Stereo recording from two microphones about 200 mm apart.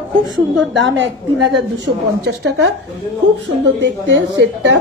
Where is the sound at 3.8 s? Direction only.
60° right (ahead or behind).